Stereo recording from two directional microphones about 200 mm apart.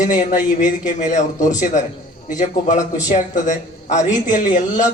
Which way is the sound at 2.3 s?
40° left (ahead or behind).